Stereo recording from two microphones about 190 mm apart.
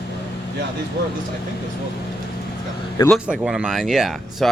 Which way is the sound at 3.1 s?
5° right (ahead or behind).